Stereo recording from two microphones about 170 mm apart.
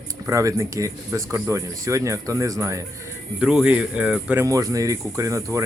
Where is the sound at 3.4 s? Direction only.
5° right (ahead or behind).